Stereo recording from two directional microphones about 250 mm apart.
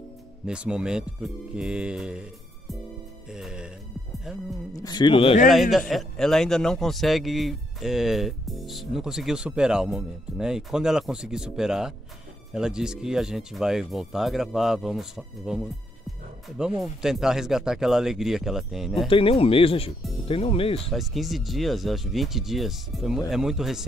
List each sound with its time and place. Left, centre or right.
0.5 s a man's voice: centre
3.3 s music: centre
4.2 s speech: centre
4.7 s speech: centre
5.5 s a man's voice: centre
19.0 s speech: left
20.9 s a man's voice: centre